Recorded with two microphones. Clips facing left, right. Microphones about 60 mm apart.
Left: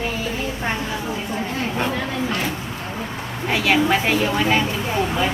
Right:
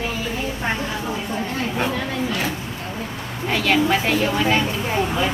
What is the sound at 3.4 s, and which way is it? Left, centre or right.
A woman's voice, centre.